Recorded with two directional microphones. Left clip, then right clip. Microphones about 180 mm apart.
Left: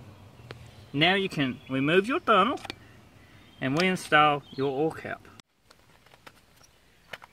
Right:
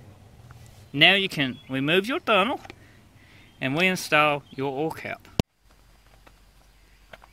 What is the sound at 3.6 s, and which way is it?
Speech, 20° right (ahead or behind).